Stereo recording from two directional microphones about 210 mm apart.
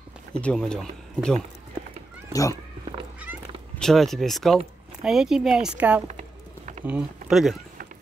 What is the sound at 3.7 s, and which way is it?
Speech, centre (ahead or behind).